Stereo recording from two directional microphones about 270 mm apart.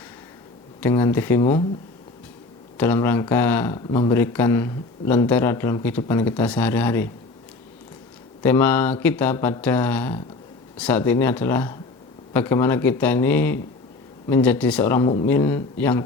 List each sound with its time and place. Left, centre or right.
0.8 s speech: centre
2.7 s speech: centre
8.4 s speech: centre